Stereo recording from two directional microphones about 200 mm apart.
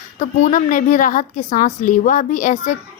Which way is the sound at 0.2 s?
40° left (ahead or behind).